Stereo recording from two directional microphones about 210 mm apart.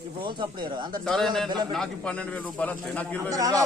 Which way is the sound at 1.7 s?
5° left (ahead or behind).